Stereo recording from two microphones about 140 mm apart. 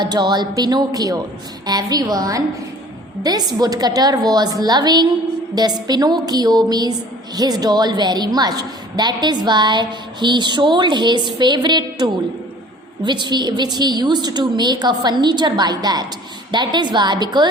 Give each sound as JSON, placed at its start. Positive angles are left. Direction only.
{"t": 0.0, "sound": "a woman's voice", "side_deg": -30}